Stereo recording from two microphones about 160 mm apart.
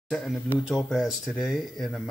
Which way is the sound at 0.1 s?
Centre (ahead or behind).